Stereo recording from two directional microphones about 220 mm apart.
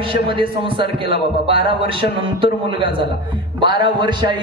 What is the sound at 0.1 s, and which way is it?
A man's voice, 25° right (ahead or behind).